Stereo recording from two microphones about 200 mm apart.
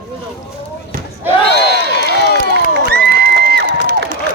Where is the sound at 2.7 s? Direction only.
50° right (ahead or behind).